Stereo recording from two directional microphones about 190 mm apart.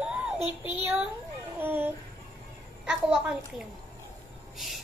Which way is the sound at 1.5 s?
10° right (ahead or behind).